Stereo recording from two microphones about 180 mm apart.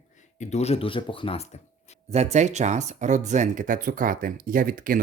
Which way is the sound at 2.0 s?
35° right (ahead or behind).